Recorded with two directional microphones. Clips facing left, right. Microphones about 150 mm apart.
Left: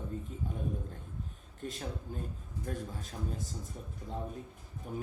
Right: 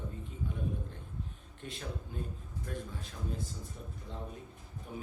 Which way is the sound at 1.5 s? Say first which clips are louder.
Left 3 dB; 45° left (ahead or behind).